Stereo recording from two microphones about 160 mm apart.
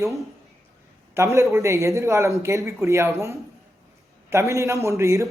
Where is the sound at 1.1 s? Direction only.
15° right (ahead or behind).